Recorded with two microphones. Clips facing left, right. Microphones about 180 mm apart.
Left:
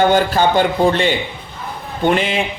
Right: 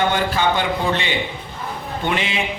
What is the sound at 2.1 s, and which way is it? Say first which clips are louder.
Speech: left 6 dB; 45° left (ahead or behind).